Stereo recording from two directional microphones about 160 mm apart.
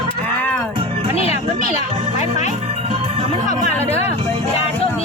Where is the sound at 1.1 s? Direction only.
40° left (ahead or behind).